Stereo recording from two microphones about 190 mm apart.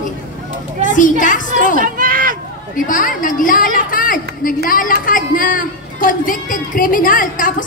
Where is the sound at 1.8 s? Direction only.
45° right (ahead or behind).